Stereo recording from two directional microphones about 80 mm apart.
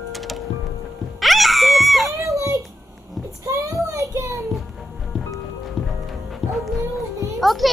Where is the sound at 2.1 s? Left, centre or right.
Right.